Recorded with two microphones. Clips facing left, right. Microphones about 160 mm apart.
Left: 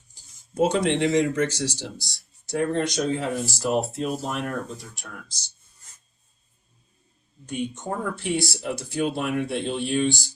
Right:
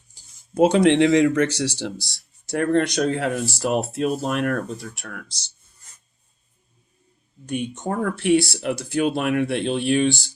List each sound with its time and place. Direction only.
0.6 s speech: 75° right (ahead or behind)
7.5 s speech: 65° right (ahead or behind)